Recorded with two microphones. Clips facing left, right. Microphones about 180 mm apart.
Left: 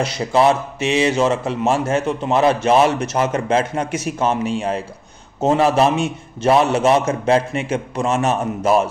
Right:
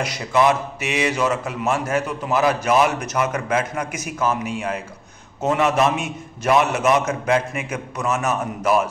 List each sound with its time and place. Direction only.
0.0 s a man's voice: 30° left (ahead or behind)